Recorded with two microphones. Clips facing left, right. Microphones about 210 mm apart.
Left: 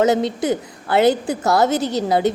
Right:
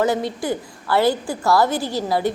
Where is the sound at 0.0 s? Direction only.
20° left (ahead or behind).